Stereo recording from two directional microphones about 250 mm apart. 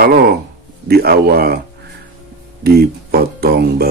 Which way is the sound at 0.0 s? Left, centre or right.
Right.